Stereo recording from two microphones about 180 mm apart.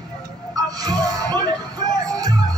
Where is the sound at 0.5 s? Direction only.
20° right (ahead or behind).